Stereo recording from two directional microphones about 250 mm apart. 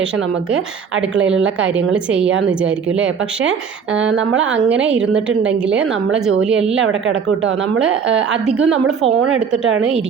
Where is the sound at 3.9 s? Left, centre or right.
Right.